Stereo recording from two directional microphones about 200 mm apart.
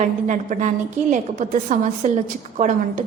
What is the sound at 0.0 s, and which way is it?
A woman's voice, 40° right (ahead or behind).